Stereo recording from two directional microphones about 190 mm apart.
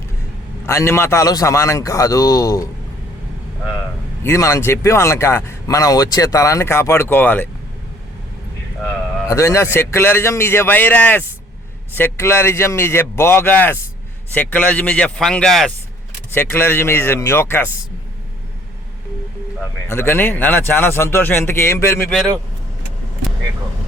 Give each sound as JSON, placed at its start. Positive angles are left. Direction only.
{"t": 0.6, "sound": "speech", "side_deg": 15}
{"t": 4.2, "sound": "speech", "side_deg": 15}
{"t": 9.2, "sound": "speech", "side_deg": 15}
{"t": 19.9, "sound": "speech", "side_deg": 10}